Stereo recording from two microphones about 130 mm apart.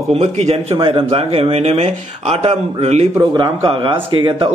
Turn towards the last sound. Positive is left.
turn(degrees=-40)  # may be behind; listen again after turning